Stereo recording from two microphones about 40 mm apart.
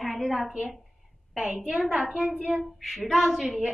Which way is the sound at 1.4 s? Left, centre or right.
Right.